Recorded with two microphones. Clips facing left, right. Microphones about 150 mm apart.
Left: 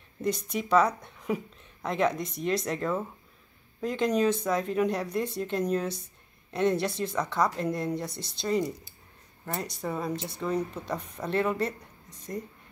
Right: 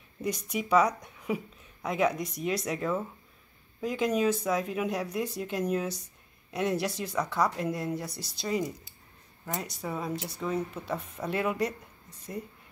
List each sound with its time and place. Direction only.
0.2 s speech: 10° right (ahead or behind)
8.1 s speech: 25° left (ahead or behind)
8.4 s speech: 5° right (ahead or behind)